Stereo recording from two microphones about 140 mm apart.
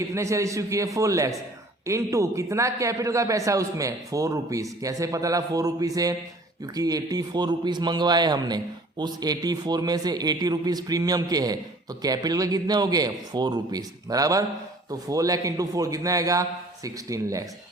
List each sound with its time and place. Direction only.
0.1 s a man's voice: 20° right (ahead or behind)